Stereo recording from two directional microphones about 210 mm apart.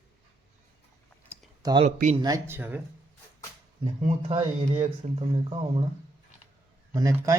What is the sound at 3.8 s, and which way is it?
Speech, 25° right (ahead or behind).